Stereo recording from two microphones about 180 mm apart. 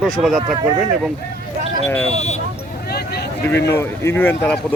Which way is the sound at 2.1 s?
40° left (ahead or behind).